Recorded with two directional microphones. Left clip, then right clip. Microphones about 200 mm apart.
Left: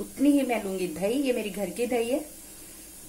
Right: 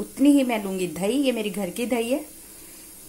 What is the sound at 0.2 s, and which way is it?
Speech, 45° right (ahead or behind).